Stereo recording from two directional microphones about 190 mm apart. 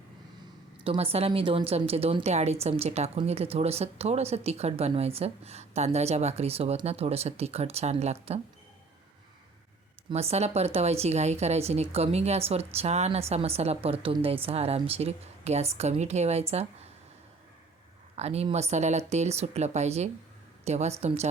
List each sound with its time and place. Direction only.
0.9 s a woman's voice: 30° right (ahead or behind)
10.1 s a woman's voice: 30° right (ahead or behind)
18.2 s a woman's voice: 35° right (ahead or behind)